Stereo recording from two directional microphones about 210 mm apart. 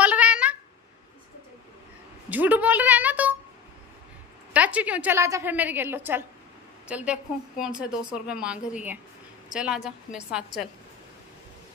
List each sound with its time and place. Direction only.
0.0 s cat: 5° right (ahead or behind)
2.2 s a woman's voice: 10° right (ahead or behind)
4.6 s a woman's voice: 5° right (ahead or behind)